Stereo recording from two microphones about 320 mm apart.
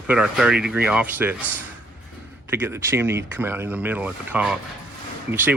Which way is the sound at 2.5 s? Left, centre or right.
Centre.